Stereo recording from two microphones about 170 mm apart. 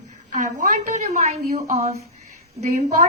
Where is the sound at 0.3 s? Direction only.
45° right (ahead or behind).